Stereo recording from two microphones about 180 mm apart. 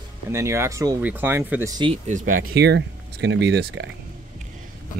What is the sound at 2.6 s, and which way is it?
Speech, 70° right (ahead or behind).